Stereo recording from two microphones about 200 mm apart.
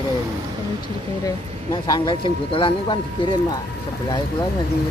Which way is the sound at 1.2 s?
20° left (ahead or behind).